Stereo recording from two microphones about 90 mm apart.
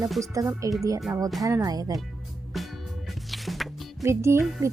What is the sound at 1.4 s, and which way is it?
Speech, 35° right (ahead or behind).